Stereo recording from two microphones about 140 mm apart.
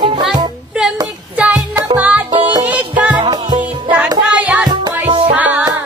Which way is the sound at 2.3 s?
35° right (ahead or behind).